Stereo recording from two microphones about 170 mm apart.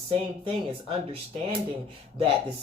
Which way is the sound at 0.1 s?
35° right (ahead or behind).